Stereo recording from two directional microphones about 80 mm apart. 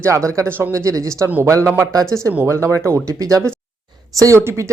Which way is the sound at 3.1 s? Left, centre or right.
Right.